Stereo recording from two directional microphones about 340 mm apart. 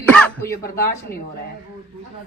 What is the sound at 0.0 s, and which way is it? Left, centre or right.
Throat clearing, centre.